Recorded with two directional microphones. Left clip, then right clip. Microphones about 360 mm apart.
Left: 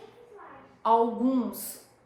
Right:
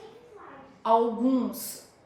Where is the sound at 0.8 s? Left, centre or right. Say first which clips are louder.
Even; centre.